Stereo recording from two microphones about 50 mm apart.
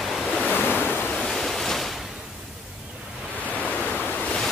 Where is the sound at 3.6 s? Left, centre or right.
Left.